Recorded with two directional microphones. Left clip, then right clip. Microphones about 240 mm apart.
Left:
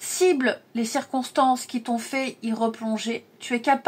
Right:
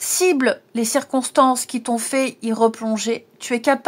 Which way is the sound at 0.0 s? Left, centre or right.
Right.